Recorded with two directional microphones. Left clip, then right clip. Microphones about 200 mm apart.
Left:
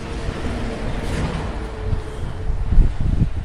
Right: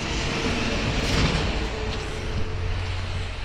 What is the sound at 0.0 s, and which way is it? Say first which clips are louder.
Vehicle: right 3 dB; 30° right (ahead or behind).